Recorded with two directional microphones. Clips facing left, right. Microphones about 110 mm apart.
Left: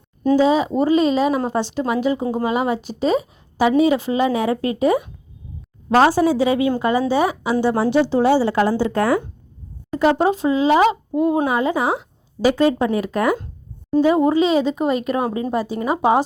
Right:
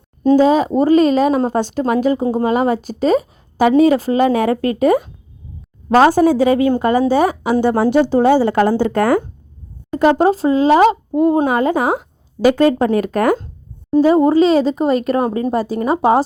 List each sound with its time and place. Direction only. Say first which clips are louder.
0.3 s a woman's voice: right 3 dB; 45° right (ahead or behind)
9.9 s a woman's voice: right 4 dB; 45° right (ahead or behind)
14.0 s speech: right 4 dB; 40° right (ahead or behind)